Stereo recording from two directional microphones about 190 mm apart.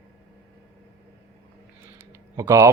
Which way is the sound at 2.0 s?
15° right (ahead or behind).